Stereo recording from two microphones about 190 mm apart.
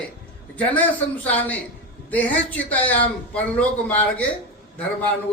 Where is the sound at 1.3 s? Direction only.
10° left (ahead or behind).